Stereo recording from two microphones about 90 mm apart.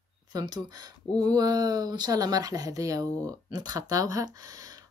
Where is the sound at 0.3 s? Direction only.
50° right (ahead or behind).